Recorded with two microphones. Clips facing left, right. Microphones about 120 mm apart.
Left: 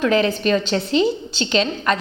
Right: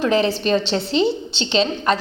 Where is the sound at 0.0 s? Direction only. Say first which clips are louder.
Even; 30° right (ahead or behind).